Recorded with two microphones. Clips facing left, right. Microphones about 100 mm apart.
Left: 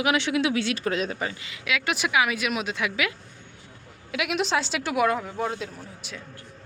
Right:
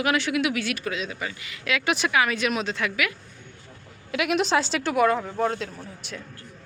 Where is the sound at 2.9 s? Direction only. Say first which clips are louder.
Even; 25° left (ahead or behind).